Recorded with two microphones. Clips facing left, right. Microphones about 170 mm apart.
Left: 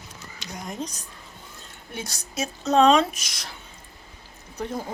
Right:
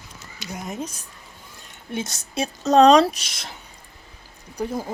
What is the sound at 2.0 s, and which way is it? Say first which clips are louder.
A woman's voice: right 4 dB; 25° right (ahead or behind).